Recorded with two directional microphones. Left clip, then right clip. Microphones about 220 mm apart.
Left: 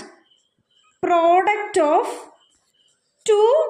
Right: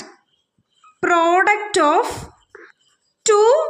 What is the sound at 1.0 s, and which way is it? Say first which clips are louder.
A woman's voice: right 1 dB; 45° right (ahead or behind).